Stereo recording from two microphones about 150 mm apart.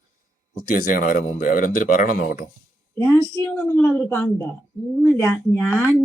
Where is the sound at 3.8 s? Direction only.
10° left (ahead or behind).